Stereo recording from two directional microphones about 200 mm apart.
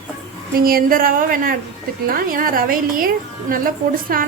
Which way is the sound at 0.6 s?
45° right (ahead or behind).